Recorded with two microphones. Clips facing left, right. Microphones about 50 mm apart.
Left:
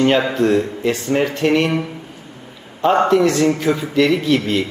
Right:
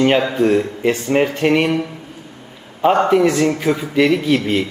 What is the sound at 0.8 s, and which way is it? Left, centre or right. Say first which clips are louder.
Speech: right 2 dB; right.